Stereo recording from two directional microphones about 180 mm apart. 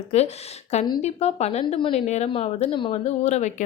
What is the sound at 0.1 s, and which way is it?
Speech, 35° left (ahead or behind).